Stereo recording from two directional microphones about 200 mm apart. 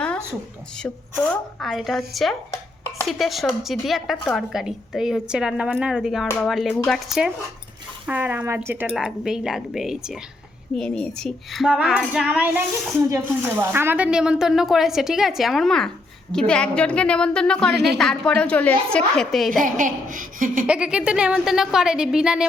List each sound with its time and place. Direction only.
0.8 s a child's voice: 5° left (ahead or behind)
19.5 s speech: 40° right (ahead or behind)
20.7 s a child's voice: 5° right (ahead or behind)